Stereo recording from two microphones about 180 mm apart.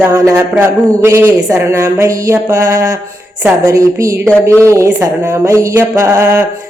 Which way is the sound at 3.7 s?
20° right (ahead or behind).